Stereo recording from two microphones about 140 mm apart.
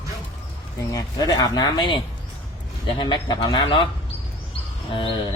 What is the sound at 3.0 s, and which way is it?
Speech, 35° left (ahead or behind).